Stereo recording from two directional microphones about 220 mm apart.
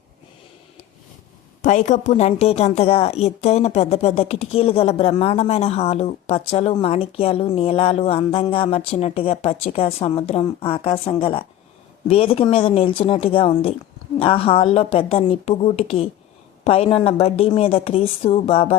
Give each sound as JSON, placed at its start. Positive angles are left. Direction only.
{"t": 1.6, "sound": "a woman's voice", "side_deg": 35}